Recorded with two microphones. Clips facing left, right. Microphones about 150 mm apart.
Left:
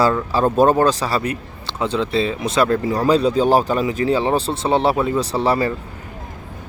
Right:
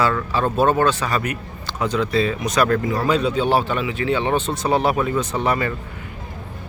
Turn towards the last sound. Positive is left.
turn(degrees=30)  # may be behind; listen again after turning